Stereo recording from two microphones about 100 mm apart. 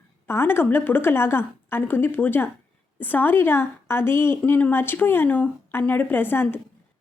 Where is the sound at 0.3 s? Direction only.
25° left (ahead or behind).